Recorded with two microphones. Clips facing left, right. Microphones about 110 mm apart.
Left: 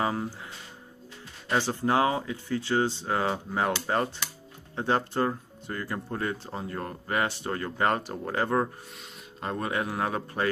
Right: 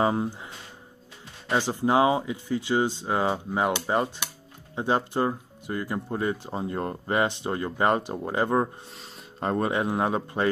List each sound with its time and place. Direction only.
0.0 s speech: 25° right (ahead or behind)
1.5 s speech: 15° right (ahead or behind)
8.9 s a sound: 35° right (ahead or behind)
9.7 s a man's voice: 20° right (ahead or behind)